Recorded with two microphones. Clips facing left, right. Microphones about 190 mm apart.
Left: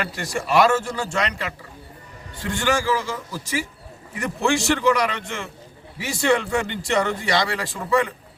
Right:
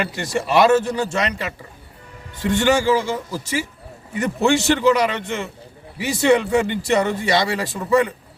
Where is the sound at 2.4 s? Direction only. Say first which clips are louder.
Right 5 dB; 20° right (ahead or behind).